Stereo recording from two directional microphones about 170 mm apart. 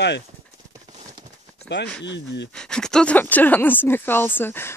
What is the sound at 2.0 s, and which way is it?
Speech, 90° left.